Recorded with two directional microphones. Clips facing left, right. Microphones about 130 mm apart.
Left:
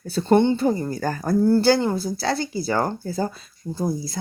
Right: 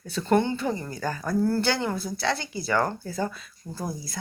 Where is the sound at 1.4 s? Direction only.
30° left (ahead or behind).